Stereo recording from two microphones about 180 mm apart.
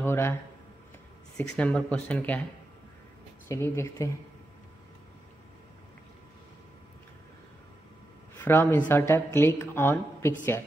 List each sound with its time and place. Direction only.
0.0 s a woman's voice: 15° left (ahead or behind)
3.4 s a woman's voice: 15° left (ahead or behind)
8.4 s a woman's voice: 10° left (ahead or behind)